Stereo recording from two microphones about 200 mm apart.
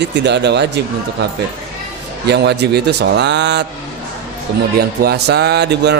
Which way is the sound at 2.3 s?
55° right (ahead or behind).